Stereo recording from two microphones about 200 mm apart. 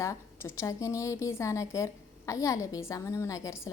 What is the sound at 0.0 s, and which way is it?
A woman's voice, 15° left (ahead or behind).